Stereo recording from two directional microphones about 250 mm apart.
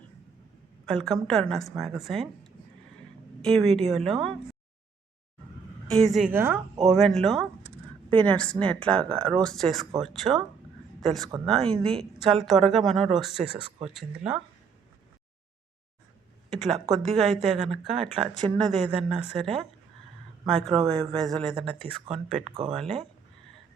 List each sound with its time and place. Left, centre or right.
0.9 s speech: centre
3.4 s speech: centre
5.9 s speech: centre
16.5 s speech: centre
20.5 s speech: centre
22.4 s speech: centre
22.7 s speech: centre